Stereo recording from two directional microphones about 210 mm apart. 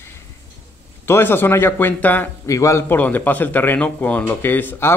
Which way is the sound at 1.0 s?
10° left (ahead or behind).